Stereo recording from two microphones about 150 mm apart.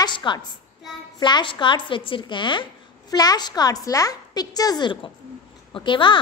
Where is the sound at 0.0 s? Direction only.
30° left (ahead or behind).